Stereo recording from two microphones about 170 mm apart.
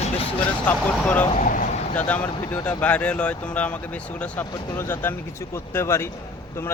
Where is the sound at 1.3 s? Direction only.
50° left (ahead or behind).